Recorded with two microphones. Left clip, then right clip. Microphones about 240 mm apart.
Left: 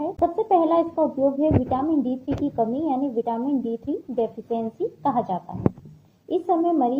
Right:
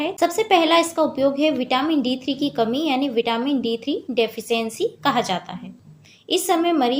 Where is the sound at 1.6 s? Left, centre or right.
Right.